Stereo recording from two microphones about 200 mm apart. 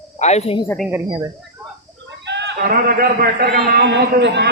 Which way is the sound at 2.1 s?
60° right (ahead or behind).